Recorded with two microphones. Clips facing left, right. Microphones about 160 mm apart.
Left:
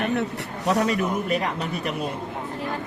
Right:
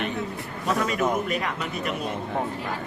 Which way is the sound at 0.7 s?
35° left (ahead or behind).